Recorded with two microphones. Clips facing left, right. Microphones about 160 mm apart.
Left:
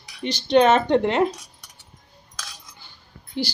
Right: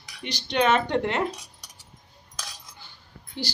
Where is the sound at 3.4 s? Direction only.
15° left (ahead or behind).